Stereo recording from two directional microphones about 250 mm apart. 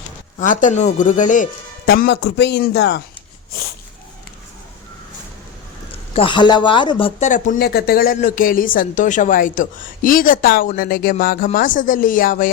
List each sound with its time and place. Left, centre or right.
0.3 s speech: left
6.1 s speech: centre